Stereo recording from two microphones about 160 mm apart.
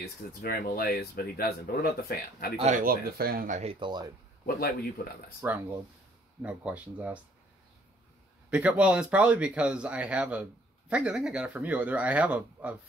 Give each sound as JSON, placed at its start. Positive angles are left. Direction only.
{"t": 0.4, "sound": "speech", "side_deg": 70}
{"t": 2.5, "sound": "speech", "side_deg": -40}
{"t": 2.8, "sound": "speech", "side_deg": -70}
{"t": 3.8, "sound": "speech", "side_deg": -25}
{"t": 4.5, "sound": "speech", "side_deg": 70}
{"t": 5.4, "sound": "speech", "side_deg": -15}
{"t": 8.5, "sound": "speech", "side_deg": -10}